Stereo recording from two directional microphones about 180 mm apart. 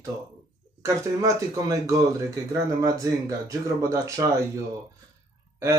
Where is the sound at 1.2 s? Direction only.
20° right (ahead or behind).